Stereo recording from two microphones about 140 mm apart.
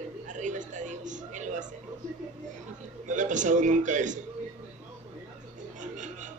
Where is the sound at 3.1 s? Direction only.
65° right (ahead or behind).